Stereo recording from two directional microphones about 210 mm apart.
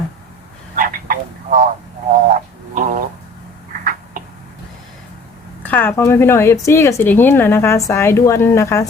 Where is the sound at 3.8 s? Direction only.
40° right (ahead or behind).